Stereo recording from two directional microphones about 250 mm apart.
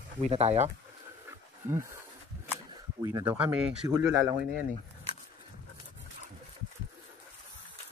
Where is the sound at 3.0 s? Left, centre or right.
Centre.